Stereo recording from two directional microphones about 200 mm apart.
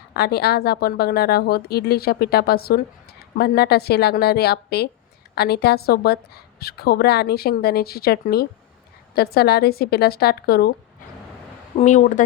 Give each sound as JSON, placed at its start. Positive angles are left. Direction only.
{"t": 0.1, "sound": "a woman's voice", "side_deg": 50}
{"t": 11.8, "sound": "speech", "side_deg": 35}